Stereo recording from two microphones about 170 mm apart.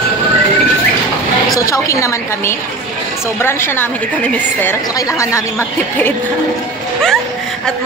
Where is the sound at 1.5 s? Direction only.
20° left (ahead or behind).